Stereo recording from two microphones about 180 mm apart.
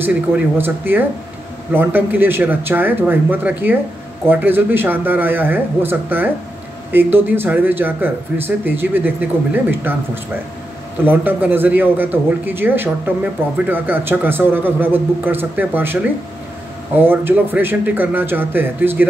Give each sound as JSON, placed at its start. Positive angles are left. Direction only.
{"t": 0.6, "sound": "a man's voice", "side_deg": -10}
{"t": 11.1, "sound": "a man's voice", "side_deg": -10}